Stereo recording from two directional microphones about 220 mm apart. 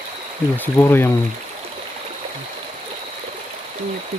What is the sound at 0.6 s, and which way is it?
Speech, 10° left (ahead or behind).